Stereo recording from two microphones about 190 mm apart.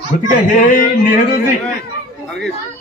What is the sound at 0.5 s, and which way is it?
Speech, 45° left (ahead or behind).